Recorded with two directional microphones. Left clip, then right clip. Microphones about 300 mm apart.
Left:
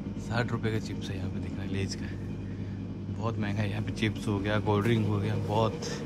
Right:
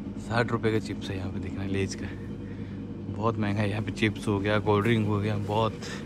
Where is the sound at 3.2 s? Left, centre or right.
Centre.